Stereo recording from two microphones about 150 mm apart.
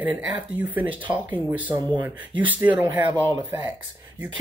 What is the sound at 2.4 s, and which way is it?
Speech, 10° right (ahead or behind).